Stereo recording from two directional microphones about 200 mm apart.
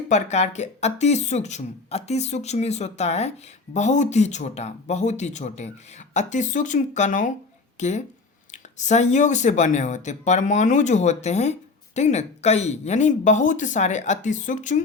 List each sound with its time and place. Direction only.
0.1 s speech: 35° left (ahead or behind)